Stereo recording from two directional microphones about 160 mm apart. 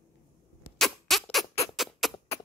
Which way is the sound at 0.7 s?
Centre (ahead or behind).